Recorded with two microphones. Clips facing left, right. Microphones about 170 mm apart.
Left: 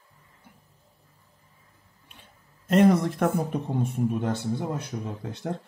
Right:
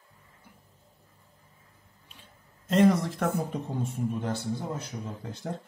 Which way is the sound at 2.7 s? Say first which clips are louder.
Left 3 dB; 55° left (ahead or behind).